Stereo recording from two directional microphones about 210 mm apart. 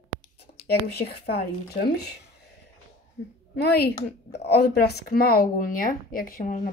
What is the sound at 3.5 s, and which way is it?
A woman's voice, 50° left (ahead or behind).